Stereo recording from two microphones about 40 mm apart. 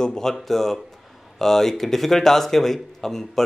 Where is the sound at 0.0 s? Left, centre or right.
Centre.